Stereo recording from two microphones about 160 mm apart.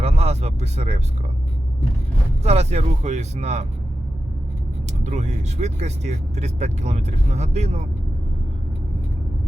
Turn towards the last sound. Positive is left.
turn(degrees=-45)  # may be behind; listen again after turning